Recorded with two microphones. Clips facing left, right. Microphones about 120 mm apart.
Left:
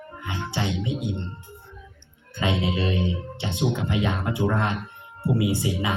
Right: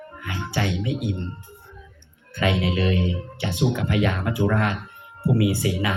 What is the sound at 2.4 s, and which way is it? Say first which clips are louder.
Speech: right 2 dB; 25° left (ahead or behind).